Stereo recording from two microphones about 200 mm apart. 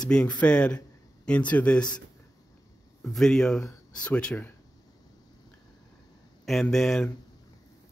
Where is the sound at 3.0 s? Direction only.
Centre (ahead or behind).